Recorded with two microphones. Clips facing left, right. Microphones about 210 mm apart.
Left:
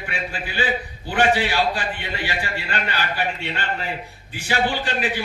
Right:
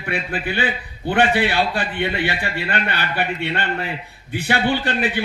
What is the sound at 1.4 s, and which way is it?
A man's voice, 60° right (ahead or behind).